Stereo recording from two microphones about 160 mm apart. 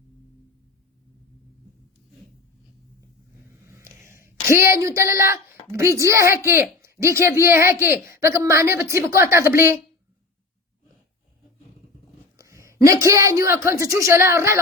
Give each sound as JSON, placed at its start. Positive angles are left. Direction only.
{"t": 3.7, "sound": "a sound", "side_deg": -15}
{"t": 5.7, "sound": "a woman's voice", "side_deg": -20}
{"t": 12.4, "sound": "a woman's voice", "side_deg": -20}